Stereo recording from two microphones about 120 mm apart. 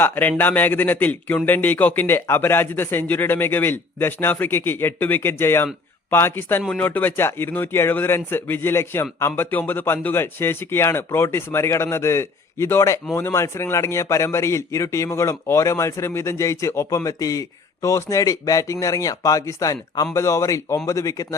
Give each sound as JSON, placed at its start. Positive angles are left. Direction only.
{"t": 0.0, "sound": "speech", "side_deg": 15}